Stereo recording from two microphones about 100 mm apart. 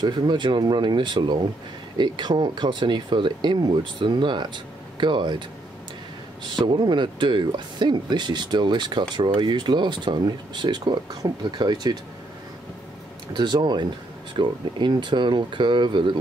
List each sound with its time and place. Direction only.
0.0 s speech: 50° right (ahead or behind)
6.6 s speech: 50° right (ahead or behind)
13.3 s speech: 50° right (ahead or behind)